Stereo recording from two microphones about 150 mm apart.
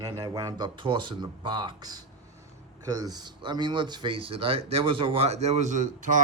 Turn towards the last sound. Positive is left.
turn(degrees=-60)  # may be behind; listen again after turning